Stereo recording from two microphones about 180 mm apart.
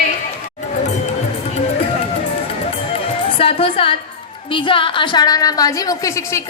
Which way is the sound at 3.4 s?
30° left (ahead or behind).